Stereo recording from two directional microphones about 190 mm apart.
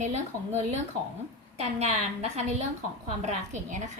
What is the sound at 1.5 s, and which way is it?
A woman's voice, 35° right (ahead or behind).